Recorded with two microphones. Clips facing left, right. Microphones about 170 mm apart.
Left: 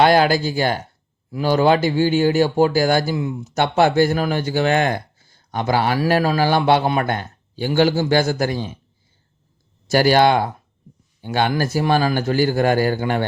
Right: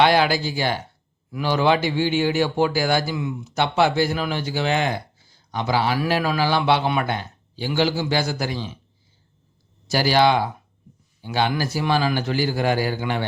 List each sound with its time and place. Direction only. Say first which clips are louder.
0.0 s a man's voice: left 3 dB; 45° left (ahead or behind)
6.0 s a man's voice: left 4 dB; 40° left (ahead or behind)
9.9 s a man's voice: left 4 dB; 50° left (ahead or behind)